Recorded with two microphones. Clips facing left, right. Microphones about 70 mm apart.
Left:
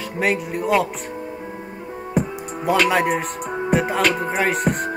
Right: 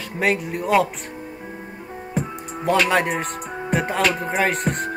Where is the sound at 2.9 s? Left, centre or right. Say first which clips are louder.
Left 1 dB; centre.